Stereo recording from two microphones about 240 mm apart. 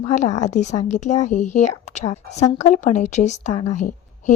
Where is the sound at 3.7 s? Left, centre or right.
Left.